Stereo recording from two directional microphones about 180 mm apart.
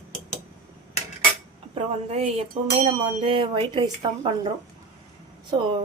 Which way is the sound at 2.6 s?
35° right (ahead or behind).